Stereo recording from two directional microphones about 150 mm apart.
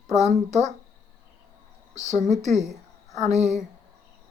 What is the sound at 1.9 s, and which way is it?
Speech, 50° right (ahead or behind).